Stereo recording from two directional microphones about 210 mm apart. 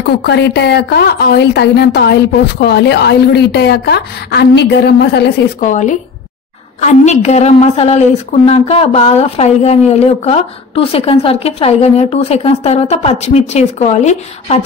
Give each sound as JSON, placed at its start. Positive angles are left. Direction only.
{"t": 0.2, "sound": "a woman's voice", "side_deg": 55}
{"t": 5.6, "sound": "a woman's voice", "side_deg": 35}